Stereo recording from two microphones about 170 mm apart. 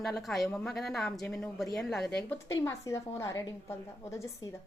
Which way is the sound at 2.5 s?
15° left (ahead or behind).